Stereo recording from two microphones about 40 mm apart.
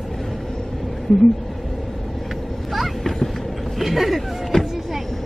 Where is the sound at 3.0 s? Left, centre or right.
Centre.